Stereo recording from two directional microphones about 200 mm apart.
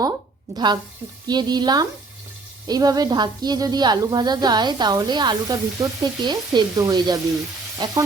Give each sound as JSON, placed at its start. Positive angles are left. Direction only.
{"t": 0.5, "sound": "a woman's voice", "side_deg": -20}